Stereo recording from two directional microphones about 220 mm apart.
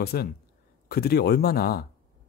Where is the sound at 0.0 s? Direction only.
45° left (ahead or behind).